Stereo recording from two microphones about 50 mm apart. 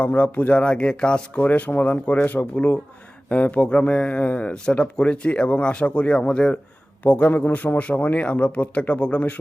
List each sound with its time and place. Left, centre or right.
0.0 s a man's voice: left
1.5 s a man's voice: left
7.0 s a man's voice: left